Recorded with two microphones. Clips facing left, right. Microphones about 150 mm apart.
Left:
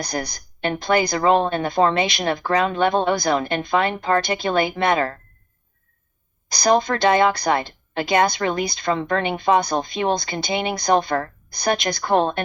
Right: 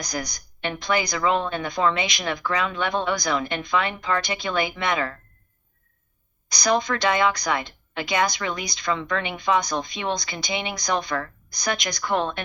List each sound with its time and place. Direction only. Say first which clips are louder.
0.0 s a woman's voice: left 4 dB; 30° left (ahead or behind)
6.5 s a woman's voice: left 4 dB; 30° left (ahead or behind)
8.0 s a woman's voice: left 5 dB; 50° left (ahead or behind)
8.3 s a woman's voice: left 7 dB; 40° left (ahead or behind)
8.8 s a woman's voice: left 3 dB; 40° left (ahead or behind)
11.0 s a woman's voice: left 5 dB; 55° left (ahead or behind)
11.6 s a woman's voice: left 6 dB; 30° left (ahead or behind)